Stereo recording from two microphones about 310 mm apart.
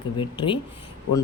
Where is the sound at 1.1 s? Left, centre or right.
Left.